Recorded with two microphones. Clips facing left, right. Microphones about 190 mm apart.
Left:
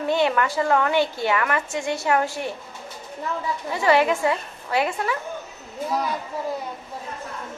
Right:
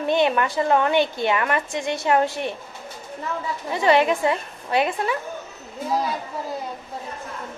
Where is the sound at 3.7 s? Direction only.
20° right (ahead or behind).